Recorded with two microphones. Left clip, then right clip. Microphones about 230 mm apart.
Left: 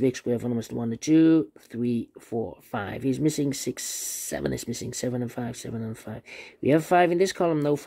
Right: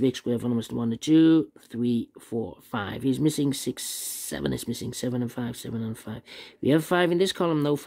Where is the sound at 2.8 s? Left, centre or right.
Right.